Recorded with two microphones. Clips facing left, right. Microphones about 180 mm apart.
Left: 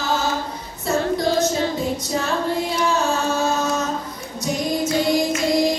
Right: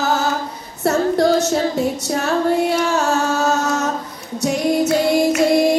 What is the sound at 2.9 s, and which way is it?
Music, 75° right (ahead or behind).